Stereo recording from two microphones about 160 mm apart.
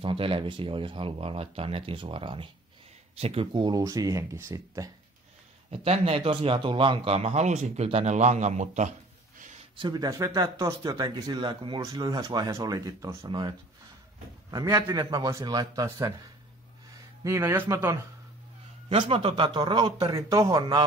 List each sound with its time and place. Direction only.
0.0 s speech: 35° right (ahead or behind)
5.7 s speech: 40° right (ahead or behind)
9.8 s speech: 30° right (ahead or behind)
10.0 s speech: 20° right (ahead or behind)
17.2 s speech: 20° right (ahead or behind)
18.9 s speech: 35° right (ahead or behind)